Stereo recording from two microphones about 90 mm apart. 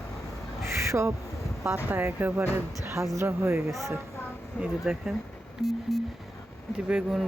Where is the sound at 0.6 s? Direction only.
30° right (ahead or behind).